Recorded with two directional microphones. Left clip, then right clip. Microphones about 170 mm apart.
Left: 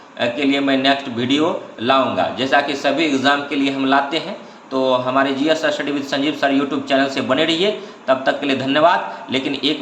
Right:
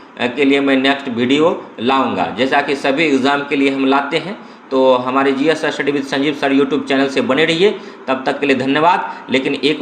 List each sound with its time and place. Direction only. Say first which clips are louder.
0.2 s a man's voice: right 4 dB; 25° right (ahead or behind)